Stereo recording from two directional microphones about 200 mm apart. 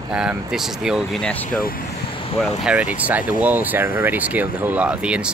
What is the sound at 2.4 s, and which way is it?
Speech, 5° right (ahead or behind).